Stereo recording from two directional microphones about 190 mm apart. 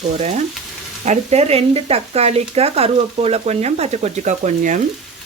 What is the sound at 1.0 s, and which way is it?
Speech, 35° right (ahead or behind).